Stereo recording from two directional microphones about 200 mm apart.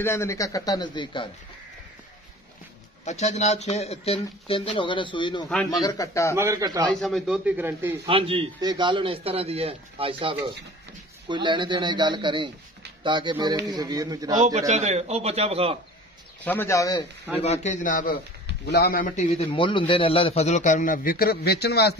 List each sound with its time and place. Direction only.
0.0 s a man's voice: 15° left (ahead or behind)
3.1 s a man's voice: 35° left (ahead or behind); by 6.3 s 15° left (ahead or behind)
6.3 s a man's voice: 15° right (ahead or behind)
6.9 s a man's voice: centre (ahead or behind)
8.1 s a man's voice: 30° right (ahead or behind)
14.7 s a man's voice: 35° right (ahead or behind)
16.4 s a man's voice: 10° left (ahead or behind)
17.4 s a man's voice: 35° left (ahead or behind); by 21.9 s 55° left (ahead or behind)